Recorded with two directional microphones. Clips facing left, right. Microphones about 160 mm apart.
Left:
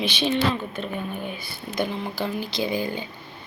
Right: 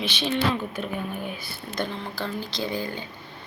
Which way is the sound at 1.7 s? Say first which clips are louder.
Left 4 dB; 10° left (ahead or behind).